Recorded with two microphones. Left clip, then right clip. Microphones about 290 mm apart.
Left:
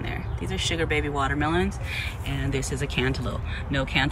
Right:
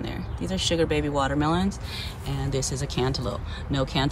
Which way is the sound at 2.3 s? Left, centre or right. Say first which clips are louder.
Right 2 dB; centre.